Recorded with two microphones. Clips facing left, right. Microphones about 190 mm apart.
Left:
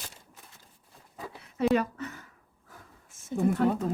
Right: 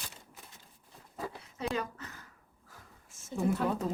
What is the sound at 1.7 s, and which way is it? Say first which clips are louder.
Speech: left 9 dB; 60° left (ahead or behind).